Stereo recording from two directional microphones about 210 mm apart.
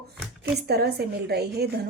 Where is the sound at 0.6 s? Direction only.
50° right (ahead or behind).